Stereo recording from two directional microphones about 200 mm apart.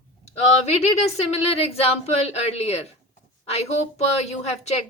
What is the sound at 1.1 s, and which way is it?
Speech, 30° left (ahead or behind).